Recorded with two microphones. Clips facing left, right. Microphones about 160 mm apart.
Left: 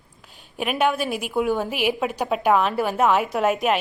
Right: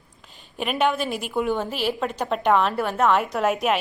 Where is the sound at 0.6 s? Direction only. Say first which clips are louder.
Left 1 dB; 10° left (ahead or behind).